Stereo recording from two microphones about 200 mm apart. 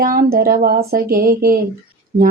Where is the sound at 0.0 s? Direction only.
45° right (ahead or behind).